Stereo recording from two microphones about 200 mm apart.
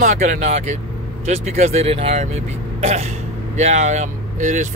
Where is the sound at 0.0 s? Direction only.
40° right (ahead or behind).